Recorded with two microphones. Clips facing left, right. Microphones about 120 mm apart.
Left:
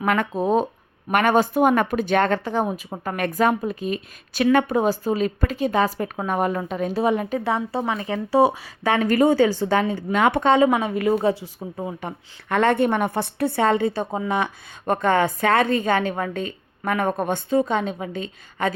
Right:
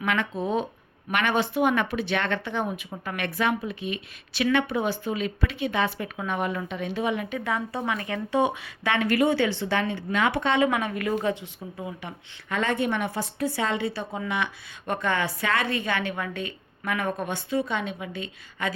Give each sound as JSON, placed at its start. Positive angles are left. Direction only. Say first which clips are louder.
{"t": 0.0, "sound": "a woman's voice", "louder": "left 5 dB", "side_deg": 45}
{"t": 12.0, "sound": "a woman's voice", "louder": "left 6 dB", "side_deg": 55}